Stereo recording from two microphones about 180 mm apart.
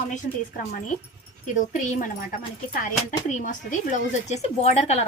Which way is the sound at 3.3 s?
45° left (ahead or behind).